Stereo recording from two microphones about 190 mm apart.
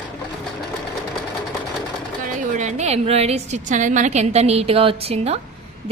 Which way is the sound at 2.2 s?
45° right (ahead or behind).